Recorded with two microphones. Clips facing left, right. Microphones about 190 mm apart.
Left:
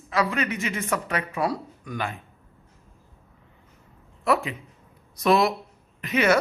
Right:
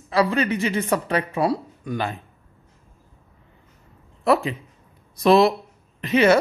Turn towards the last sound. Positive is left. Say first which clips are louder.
# right 5 dB
turn(degrees=-30)  # may be behind; listen again after turning